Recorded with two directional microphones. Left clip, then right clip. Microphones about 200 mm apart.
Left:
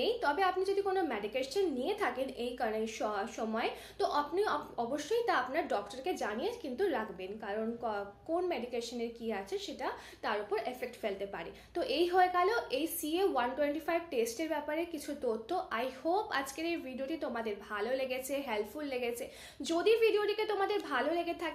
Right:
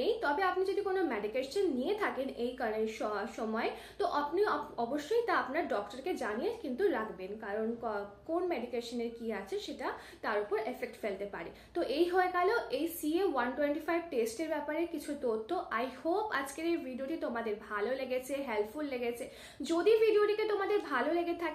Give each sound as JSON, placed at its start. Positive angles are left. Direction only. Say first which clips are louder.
{"t": 0.0, "sound": "a woman's voice", "louder": "even", "side_deg": 40}
{"t": 9.3, "sound": "a woman's voice", "louder": "even", "side_deg": 40}